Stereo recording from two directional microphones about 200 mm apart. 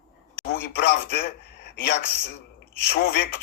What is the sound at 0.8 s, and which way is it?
Speech, 55° left (ahead or behind).